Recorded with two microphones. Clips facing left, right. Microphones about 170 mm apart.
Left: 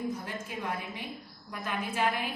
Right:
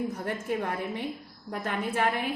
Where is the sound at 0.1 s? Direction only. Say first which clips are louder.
Right 6 dB; 60° right (ahead or behind).